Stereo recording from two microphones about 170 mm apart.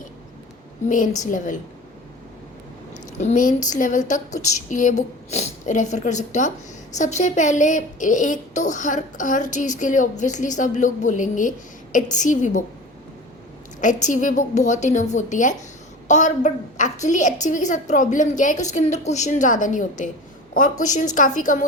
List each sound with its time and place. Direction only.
0.9 s a woman's voice: 45° left (ahead or behind)
2.9 s a woman's voice: 45° left (ahead or behind)
13.8 s a woman's voice: 50° left (ahead or behind)